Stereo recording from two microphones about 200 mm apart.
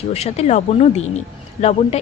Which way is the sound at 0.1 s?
30° left (ahead or behind).